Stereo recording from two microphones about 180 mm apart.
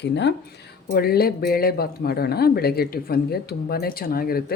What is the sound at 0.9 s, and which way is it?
Speech, 60° left (ahead or behind).